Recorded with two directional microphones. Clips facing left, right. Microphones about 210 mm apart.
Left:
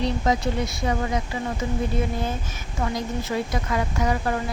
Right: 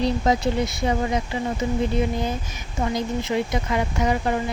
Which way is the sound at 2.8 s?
20° right (ahead or behind).